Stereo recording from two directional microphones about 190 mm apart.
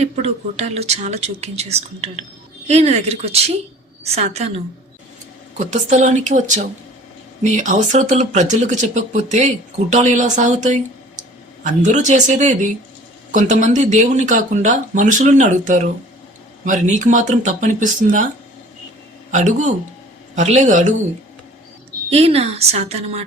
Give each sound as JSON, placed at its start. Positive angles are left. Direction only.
{"t": 0.0, "sound": "speech", "side_deg": -35}
{"t": 7.4, "sound": "speech", "side_deg": -40}
{"t": 19.3, "sound": "speech", "side_deg": -40}
{"t": 22.1, "sound": "speech", "side_deg": -30}